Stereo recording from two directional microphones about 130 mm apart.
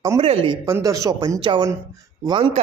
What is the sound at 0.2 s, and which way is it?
Speech, 45° right (ahead or behind).